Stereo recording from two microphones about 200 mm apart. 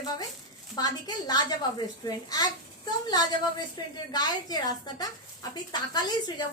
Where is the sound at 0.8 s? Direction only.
20° left (ahead or behind).